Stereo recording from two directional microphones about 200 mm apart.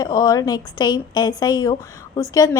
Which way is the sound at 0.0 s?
20° left (ahead or behind).